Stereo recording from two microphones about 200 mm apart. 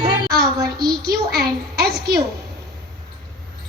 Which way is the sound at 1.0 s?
50° right (ahead or behind).